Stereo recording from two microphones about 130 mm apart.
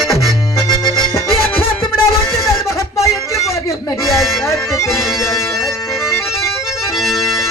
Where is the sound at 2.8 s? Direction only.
25° left (ahead or behind).